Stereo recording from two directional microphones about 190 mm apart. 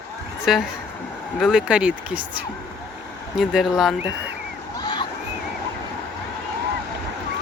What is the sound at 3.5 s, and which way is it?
Speech, centre (ahead or behind).